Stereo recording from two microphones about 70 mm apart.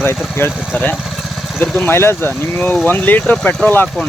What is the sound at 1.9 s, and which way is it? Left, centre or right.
Speech, left.